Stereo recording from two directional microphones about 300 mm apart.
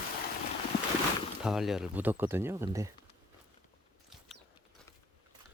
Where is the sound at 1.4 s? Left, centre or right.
Centre.